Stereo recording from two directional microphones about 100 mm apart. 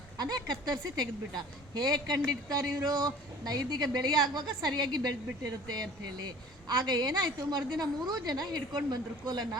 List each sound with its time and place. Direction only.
0.2 s a woman's voice: 45° right (ahead or behind)